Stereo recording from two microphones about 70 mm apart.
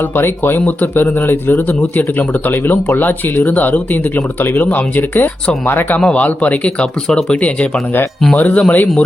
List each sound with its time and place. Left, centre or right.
0.0 s speech: left
6.0 s speech: centre